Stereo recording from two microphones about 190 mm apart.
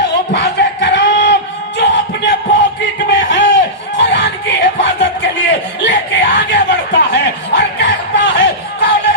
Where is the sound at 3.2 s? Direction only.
65° left (ahead or behind).